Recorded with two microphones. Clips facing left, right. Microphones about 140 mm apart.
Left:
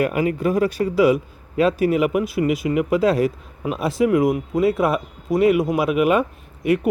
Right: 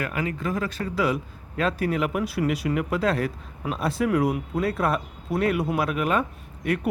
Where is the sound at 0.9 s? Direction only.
5° left (ahead or behind).